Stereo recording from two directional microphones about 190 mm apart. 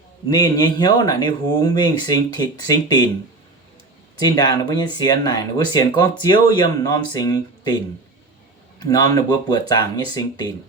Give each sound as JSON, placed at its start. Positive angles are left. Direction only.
{"t": 0.3, "sound": "speech", "side_deg": 20}
{"t": 4.2, "sound": "speech", "side_deg": 20}
{"t": 8.8, "sound": "speech", "side_deg": 20}